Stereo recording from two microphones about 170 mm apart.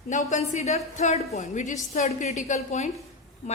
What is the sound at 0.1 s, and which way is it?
A woman's voice, 45° left (ahead or behind).